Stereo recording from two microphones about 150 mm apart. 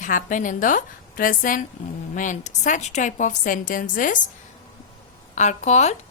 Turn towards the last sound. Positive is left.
turn(degrees=50)  # may be behind; listen again after turning